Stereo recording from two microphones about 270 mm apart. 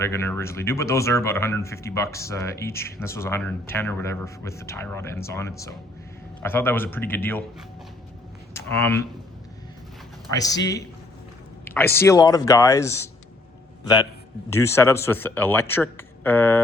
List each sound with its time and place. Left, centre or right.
0.0 s speech: centre
8.5 s speech: centre
10.3 s a man's voice: centre